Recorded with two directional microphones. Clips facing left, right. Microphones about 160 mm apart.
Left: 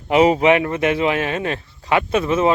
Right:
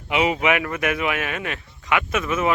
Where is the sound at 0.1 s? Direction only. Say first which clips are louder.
Left 7 dB; 40° left (ahead or behind).